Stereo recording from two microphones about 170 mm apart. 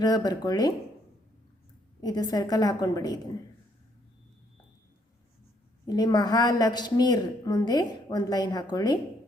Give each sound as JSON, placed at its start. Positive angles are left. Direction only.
{"t": 0.0, "sound": "a woman's voice", "side_deg": 25}
{"t": 2.0, "sound": "a woman's voice", "side_deg": 25}
{"t": 5.9, "sound": "a woman's voice", "side_deg": 25}